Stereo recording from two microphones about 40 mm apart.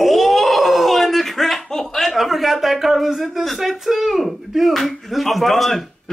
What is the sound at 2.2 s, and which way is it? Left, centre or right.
Speech, centre.